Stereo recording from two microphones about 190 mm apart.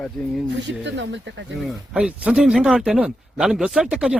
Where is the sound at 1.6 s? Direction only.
5° right (ahead or behind).